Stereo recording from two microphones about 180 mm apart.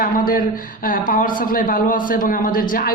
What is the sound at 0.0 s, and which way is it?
Speech, 50° left (ahead or behind).